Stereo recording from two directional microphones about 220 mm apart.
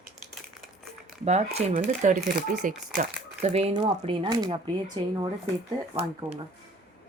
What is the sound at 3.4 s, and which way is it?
Speech, 30° right (ahead or behind).